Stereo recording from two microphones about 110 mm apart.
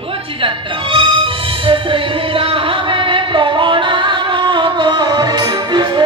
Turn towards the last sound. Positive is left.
turn(degrees=-45)  # may be behind; listen again after turning